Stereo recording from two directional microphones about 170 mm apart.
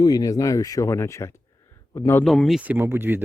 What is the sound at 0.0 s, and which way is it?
A man's voice, 20° left (ahead or behind).